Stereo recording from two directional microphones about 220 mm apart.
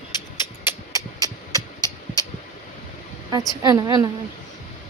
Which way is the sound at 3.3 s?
20° right (ahead or behind).